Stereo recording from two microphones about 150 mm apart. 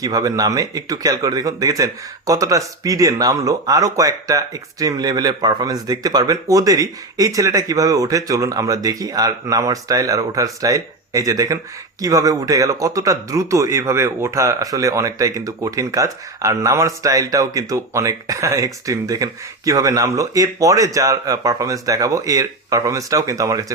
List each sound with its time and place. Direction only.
0.0 s speech: 25° right (ahead or behind)